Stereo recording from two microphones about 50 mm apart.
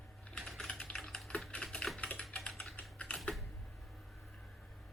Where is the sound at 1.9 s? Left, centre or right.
Left.